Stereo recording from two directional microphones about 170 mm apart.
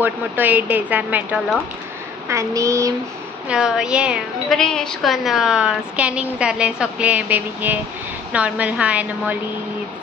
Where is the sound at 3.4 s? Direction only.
5° right (ahead or behind).